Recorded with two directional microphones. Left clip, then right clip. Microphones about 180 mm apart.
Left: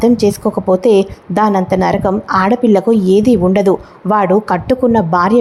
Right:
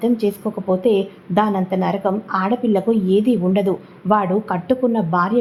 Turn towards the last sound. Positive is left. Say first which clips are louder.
# left 7 dB
turn(degrees=30)  # may be behind; listen again after turning